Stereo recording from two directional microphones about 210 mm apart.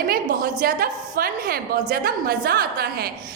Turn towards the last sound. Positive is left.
turn(degrees=-50)  # may be behind; listen again after turning